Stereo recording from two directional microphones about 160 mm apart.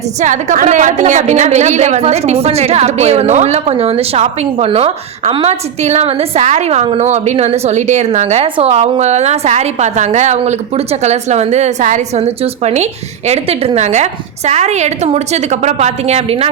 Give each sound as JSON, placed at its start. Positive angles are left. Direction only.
{"t": 0.2, "sound": "a woman's voice", "side_deg": -50}